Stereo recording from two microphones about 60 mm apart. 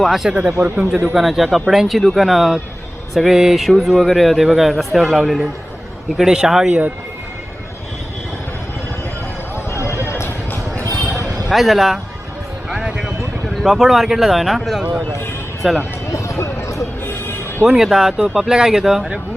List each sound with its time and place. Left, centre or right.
0.0 s speech: centre
0.3 s speech: centre
1.1 s speech: centre
9.7 s a sound: left
11.4 s speech: centre
12.7 s a sound: centre
13.6 s speech: centre
16.1 s a sound: left
17.7 s speech: centre